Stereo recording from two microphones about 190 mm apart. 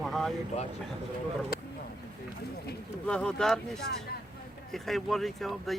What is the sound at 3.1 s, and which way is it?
Speech, 5° left (ahead or behind).